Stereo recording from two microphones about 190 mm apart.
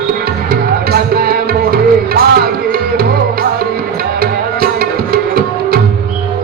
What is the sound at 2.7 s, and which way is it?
Tabla, 55° right (ahead or behind).